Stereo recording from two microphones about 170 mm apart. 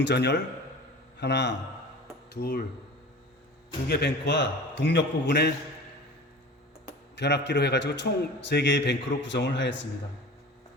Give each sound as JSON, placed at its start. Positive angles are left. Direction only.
{"t": 0.0, "sound": "a man's voice", "side_deg": 80}
{"t": 1.2, "sound": "a man's voice", "side_deg": 90}
{"t": 2.3, "sound": "speech", "side_deg": 65}
{"t": 3.8, "sound": "a man's voice", "side_deg": 75}
{"t": 7.2, "sound": "a man's voice", "side_deg": 90}